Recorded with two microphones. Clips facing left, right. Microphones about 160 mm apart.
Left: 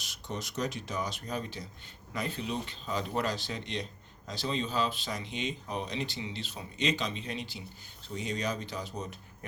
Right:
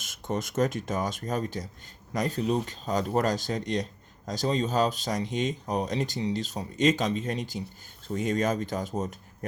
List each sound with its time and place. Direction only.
0.0 s speech: 50° right (ahead or behind)